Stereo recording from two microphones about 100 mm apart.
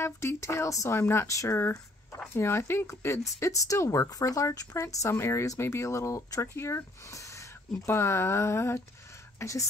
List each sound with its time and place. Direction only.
0.0 s speech: 25° left (ahead or behind)